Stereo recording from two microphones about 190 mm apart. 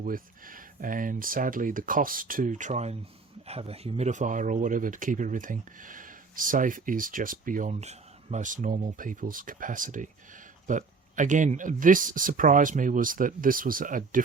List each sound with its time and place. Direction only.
0.0 s speech: 45° right (ahead or behind)